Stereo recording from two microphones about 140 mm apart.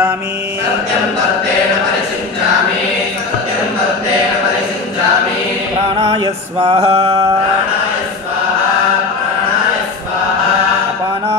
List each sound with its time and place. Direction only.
6.2 s mantra: 35° right (ahead or behind)